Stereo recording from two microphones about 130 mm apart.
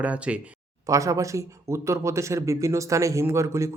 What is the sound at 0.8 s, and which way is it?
Speech, 25° right (ahead or behind).